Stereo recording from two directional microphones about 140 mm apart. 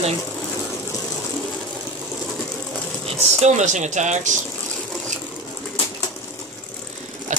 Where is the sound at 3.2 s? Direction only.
50° right (ahead or behind).